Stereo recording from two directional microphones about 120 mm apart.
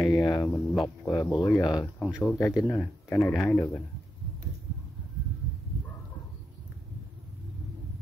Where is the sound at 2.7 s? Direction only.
20° left (ahead or behind).